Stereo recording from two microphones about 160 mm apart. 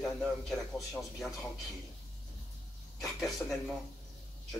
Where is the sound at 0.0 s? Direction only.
Centre (ahead or behind).